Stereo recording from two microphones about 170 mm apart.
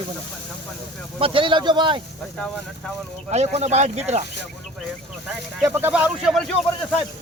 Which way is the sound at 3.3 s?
40° right (ahead or behind).